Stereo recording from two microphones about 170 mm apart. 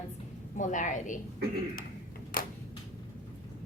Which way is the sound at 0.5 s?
50° left (ahead or behind).